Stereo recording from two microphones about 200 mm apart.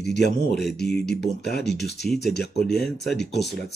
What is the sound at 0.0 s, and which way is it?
Speech, 55° left (ahead or behind).